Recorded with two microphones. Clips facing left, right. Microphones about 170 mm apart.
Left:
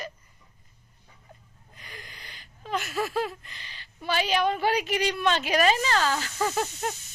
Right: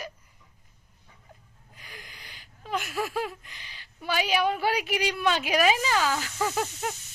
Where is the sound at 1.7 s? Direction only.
10° right (ahead or behind).